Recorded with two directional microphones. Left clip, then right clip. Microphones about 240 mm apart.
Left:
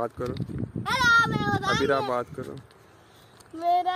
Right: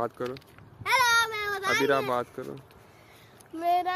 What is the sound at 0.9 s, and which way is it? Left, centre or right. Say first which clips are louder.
Speech: left 2 dB; right.